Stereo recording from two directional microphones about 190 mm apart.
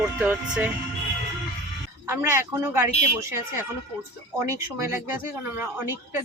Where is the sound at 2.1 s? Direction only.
15° right (ahead or behind).